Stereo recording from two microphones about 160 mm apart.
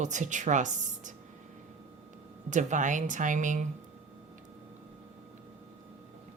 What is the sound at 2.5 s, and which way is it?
Speech, 50° right (ahead or behind).